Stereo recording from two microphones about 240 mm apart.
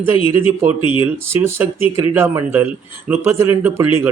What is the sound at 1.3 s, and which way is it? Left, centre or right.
A man's voice, centre.